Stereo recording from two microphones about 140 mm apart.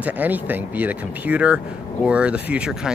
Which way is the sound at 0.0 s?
10° right (ahead or behind).